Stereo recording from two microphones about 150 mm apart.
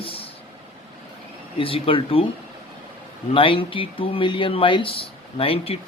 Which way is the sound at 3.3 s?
35° left (ahead or behind).